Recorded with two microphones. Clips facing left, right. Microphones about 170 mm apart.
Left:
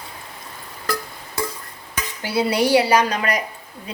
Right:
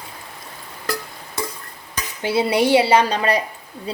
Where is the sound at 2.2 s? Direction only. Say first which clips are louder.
Right 2 dB; 25° right (ahead or behind).